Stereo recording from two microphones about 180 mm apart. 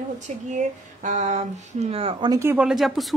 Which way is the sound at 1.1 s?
40° right (ahead or behind).